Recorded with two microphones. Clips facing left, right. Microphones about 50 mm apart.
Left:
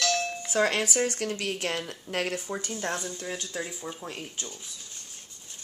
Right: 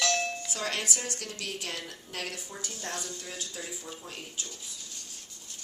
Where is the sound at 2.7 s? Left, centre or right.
Left.